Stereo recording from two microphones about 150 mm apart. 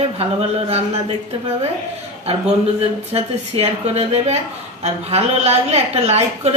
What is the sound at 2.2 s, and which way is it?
A man's voice, 40° right (ahead or behind).